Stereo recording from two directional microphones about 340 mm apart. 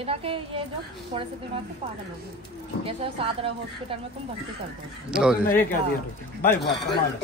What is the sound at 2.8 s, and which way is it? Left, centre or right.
A woman's voice, centre.